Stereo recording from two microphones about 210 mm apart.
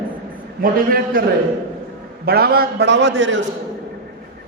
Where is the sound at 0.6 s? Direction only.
45° right (ahead or behind).